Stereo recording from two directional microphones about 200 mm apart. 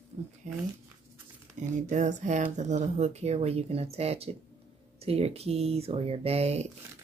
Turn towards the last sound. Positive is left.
turn(degrees=-30)  # may be behind; listen again after turning